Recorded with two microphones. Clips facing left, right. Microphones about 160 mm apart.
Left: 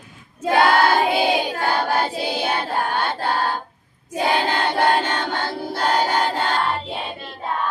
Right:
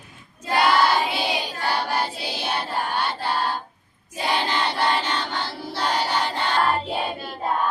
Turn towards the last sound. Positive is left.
turn(degrees=-10)  # may be behind; listen again after turning